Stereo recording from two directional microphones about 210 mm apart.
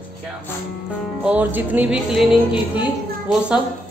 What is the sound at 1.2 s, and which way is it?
Music, 5° right (ahead or behind).